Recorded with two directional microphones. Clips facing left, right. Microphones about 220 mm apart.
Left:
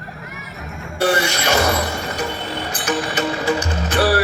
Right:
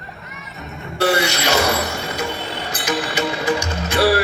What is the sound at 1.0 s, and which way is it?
Music, 10° right (ahead or behind).